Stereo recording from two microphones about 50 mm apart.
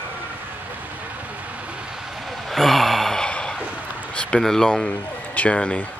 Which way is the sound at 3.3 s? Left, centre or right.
Centre.